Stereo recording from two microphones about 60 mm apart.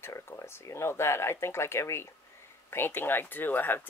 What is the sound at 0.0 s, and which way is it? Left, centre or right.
Speech, left.